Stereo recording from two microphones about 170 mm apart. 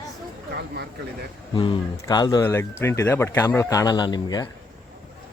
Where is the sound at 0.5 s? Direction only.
70° right (ahead or behind).